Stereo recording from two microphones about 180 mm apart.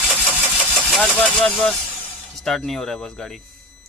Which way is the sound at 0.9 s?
Centre (ahead or behind).